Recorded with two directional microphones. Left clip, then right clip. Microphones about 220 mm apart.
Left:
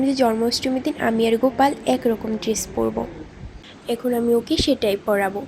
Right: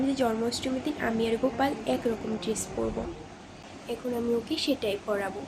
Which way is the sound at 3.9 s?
35° left (ahead or behind).